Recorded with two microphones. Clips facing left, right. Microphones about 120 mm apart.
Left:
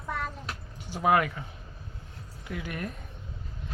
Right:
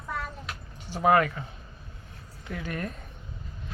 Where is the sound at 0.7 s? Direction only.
15° left (ahead or behind).